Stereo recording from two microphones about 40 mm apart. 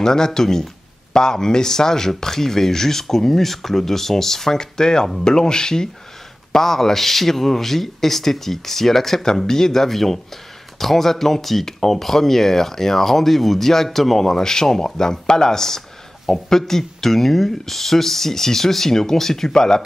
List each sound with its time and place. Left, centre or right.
0.0 s speech: centre